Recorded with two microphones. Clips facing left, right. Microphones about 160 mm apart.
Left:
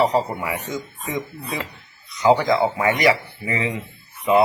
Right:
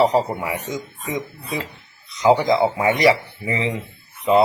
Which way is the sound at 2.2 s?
20° right (ahead or behind).